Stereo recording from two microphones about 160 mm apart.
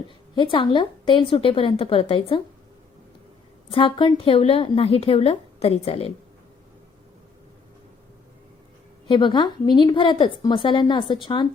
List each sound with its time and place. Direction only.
0.3 s a woman's voice: 30° left (ahead or behind)
3.7 s a woman's voice: 35° left (ahead or behind)
9.0 s a woman's voice: 30° left (ahead or behind)